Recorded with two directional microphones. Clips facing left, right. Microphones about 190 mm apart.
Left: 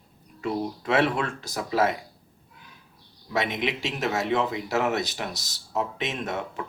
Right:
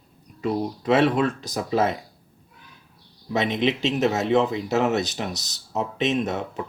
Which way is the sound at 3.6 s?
20° right (ahead or behind).